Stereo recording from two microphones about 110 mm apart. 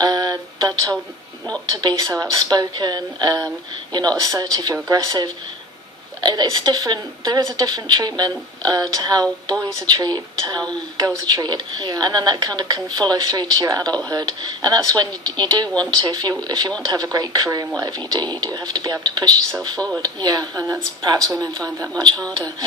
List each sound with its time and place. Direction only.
0.0 s music: 35° right (ahead or behind)
1.7 s a woman's voice: 40° right (ahead or behind)